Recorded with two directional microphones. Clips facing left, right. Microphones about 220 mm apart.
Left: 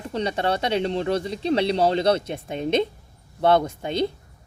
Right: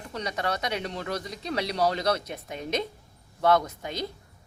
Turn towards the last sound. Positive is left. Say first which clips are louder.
# left 8 dB
turn(degrees=30)  # may be behind; listen again after turning